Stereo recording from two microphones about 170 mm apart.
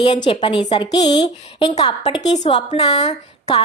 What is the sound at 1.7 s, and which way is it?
A woman's voice, 40° left (ahead or behind).